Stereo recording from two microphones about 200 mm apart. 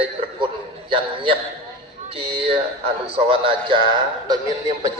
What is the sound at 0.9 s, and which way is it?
A man's voice, 25° right (ahead or behind).